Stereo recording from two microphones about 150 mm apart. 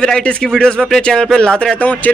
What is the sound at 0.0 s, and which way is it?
Speech, 5° left (ahead or behind).